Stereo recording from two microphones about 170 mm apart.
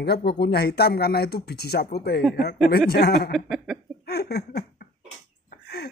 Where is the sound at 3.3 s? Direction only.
Centre (ahead or behind).